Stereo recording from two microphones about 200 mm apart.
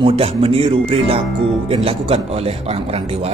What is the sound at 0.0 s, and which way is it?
Speech, 30° right (ahead or behind).